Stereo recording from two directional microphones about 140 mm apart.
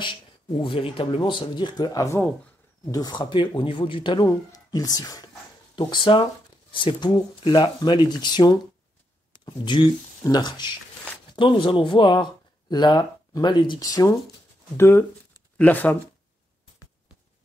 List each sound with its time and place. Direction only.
0.6 s speech: 40° left (ahead or behind)
5.8 s speech: 35° left (ahead or behind); by 16.0 s 15° left (ahead or behind)